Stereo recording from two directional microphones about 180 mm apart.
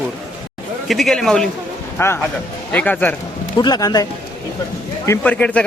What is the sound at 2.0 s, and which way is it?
Speech, 15° left (ahead or behind).